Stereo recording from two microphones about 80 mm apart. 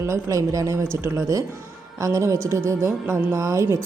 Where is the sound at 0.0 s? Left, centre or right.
Right.